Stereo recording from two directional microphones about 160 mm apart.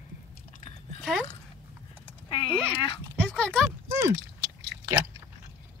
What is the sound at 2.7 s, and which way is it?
Speech, 35° left (ahead or behind).